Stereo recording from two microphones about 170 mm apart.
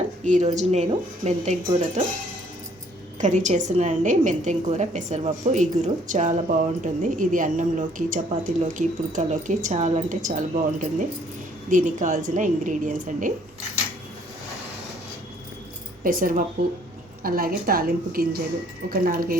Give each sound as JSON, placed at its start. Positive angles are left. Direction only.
{"t": 0.3, "sound": "a woman's voice", "side_deg": -45}
{"t": 3.2, "sound": "a woman's voice", "side_deg": -45}
{"t": 16.0, "sound": "a woman's voice", "side_deg": -55}